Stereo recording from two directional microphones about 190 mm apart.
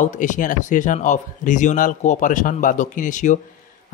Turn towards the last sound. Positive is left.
turn(degrees=40)  # may be behind; listen again after turning